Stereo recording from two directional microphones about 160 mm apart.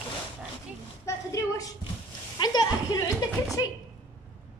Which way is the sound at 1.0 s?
20° left (ahead or behind).